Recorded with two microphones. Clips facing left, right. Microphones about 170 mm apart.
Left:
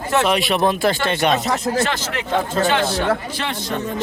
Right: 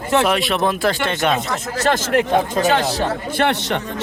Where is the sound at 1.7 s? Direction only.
45° right (ahead or behind).